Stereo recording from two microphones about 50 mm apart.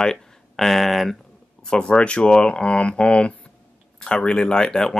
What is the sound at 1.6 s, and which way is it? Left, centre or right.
Speech, centre.